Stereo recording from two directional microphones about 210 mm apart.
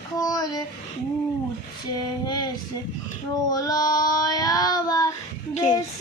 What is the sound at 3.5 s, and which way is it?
Child singing, 15° left (ahead or behind).